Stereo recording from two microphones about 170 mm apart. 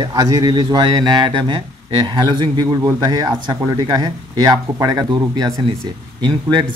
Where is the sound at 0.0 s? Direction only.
25° right (ahead or behind).